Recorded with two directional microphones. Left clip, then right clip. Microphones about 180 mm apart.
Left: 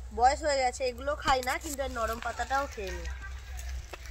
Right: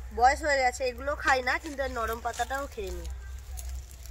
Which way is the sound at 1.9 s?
35° right (ahead or behind).